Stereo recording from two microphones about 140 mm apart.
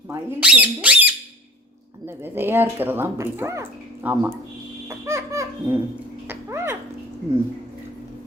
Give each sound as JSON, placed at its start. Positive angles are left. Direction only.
{"t": 0.1, "sound": "speech", "side_deg": -15}
{"t": 4.9, "sound": "music", "side_deg": -20}
{"t": 6.2, "sound": "a sound", "side_deg": -15}